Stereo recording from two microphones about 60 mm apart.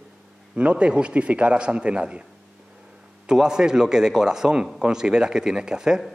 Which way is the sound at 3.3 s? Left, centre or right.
Centre.